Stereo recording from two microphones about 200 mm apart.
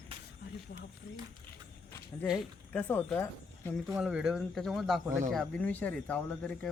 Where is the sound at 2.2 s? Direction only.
Centre (ahead or behind).